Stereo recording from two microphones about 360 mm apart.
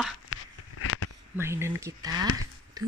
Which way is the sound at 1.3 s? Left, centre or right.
Centre.